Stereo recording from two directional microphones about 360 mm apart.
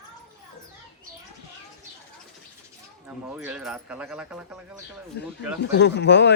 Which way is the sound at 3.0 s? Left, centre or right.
Centre.